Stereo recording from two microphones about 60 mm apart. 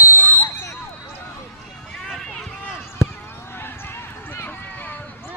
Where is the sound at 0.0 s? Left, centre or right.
Left.